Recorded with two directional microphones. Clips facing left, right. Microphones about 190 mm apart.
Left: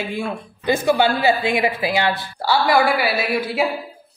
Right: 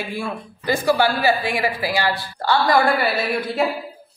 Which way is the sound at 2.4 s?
5° left (ahead or behind).